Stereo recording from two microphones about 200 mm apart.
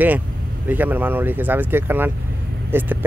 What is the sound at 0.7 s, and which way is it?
Speech, 10° right (ahead or behind).